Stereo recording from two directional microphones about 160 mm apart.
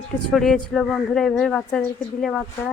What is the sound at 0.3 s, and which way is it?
Speech, 5° left (ahead or behind).